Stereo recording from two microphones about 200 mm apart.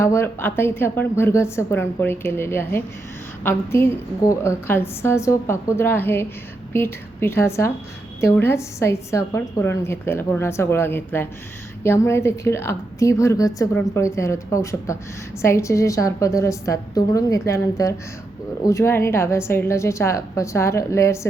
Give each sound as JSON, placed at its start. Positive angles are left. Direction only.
{"t": 0.0, "sound": "a woman's voice", "side_deg": 10}